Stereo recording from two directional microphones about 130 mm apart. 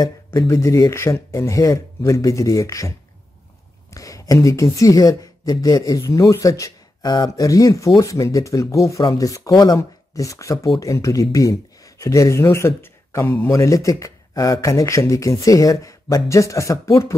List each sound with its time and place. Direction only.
0.0 s speech: 20° left (ahead or behind)
3.9 s speech: 25° left (ahead or behind)